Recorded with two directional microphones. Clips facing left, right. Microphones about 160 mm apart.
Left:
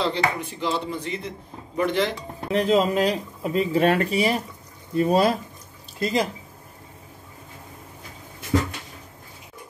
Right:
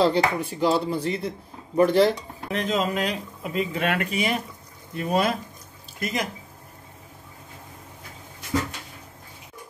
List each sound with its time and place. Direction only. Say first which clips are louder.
0.0 s speech: right 4 dB; 40° right (ahead or behind)
2.5 s speech: left 5 dB; 30° left (ahead or behind)